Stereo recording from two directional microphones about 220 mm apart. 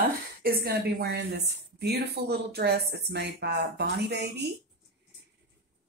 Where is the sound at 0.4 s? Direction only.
45° right (ahead or behind).